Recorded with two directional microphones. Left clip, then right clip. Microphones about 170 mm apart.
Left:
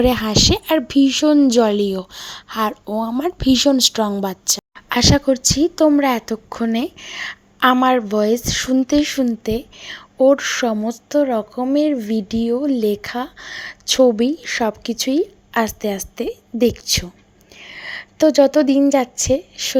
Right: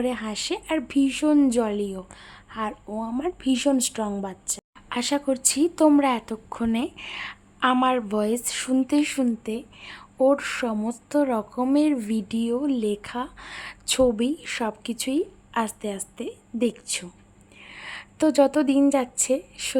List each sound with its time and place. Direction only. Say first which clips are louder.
0.0 s a woman's voice: left 13 dB; 40° left (ahead or behind)
5.3 s a woman's voice: left 7 dB; 20° left (ahead or behind)